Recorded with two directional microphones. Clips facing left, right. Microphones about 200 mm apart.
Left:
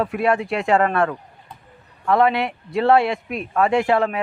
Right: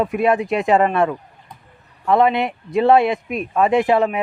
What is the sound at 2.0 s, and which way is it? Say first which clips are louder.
Speech: right 2 dB; 20° right (ahead or behind).